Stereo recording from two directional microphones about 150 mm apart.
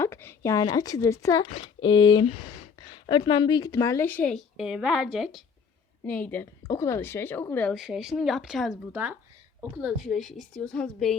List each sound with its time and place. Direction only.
0.0 s speech: 15° left (ahead or behind)
1.5 s a woman's voice: 35° left (ahead or behind); by 5.4 s 5° right (ahead or behind)
6.1 s a woman's voice: 10° left (ahead or behind)
7.8 s a woman's voice: centre (ahead or behind)